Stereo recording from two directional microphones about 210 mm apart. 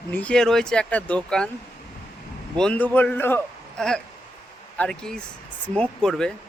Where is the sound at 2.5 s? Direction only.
5° left (ahead or behind).